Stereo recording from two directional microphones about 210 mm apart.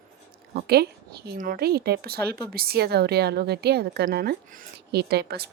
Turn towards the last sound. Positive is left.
turn(degrees=-50)  # may be behind; listen again after turning